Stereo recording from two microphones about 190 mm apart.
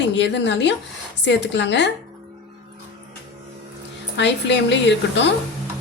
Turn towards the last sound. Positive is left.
turn(degrees=65)  # may be behind; listen again after turning